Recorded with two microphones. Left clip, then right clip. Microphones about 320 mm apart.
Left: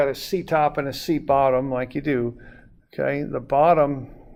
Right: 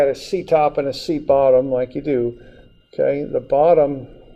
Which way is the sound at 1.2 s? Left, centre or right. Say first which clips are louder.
Right 6 dB; left.